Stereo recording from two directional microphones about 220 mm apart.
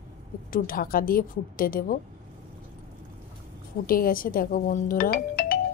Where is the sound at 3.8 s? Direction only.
40° left (ahead or behind).